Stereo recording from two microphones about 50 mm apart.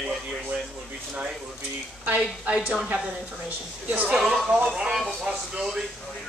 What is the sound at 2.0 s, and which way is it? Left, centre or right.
Speech, right.